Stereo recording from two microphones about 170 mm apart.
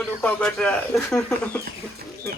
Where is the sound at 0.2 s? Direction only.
5° left (ahead or behind).